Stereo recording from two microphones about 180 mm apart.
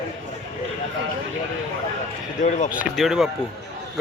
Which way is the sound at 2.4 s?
40° left (ahead or behind).